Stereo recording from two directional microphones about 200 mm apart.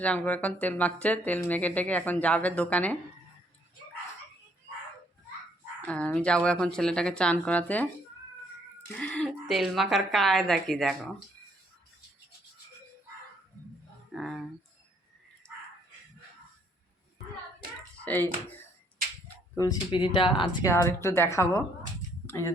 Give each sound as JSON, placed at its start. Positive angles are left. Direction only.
{"t": 0.0, "sound": "speech", "side_deg": 5}
{"t": 5.9, "sound": "speech", "side_deg": 5}
{"t": 9.0, "sound": "speech", "side_deg": 5}
{"t": 14.1, "sound": "a sound", "side_deg": 0}
{"t": 18.0, "sound": "speech", "side_deg": 10}
{"t": 19.5, "sound": "speech", "side_deg": 15}